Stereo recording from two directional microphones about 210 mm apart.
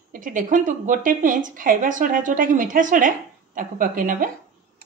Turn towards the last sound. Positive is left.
turn(degrees=-40)  # may be behind; listen again after turning